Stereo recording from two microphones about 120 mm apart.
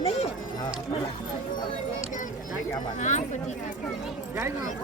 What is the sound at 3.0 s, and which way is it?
Speech, 90° left.